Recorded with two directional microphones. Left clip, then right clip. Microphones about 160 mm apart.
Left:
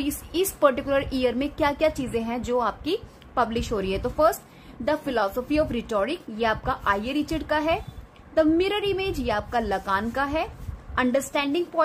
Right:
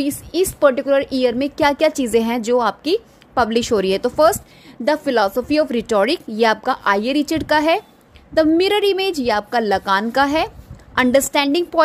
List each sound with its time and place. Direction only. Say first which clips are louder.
0.0 s a woman's voice: right 7 dB; 35° right (ahead or behind); by 2.4 s 50° right (ahead or behind)
2.4 s a woman's voice: right 8 dB; 35° right (ahead or behind)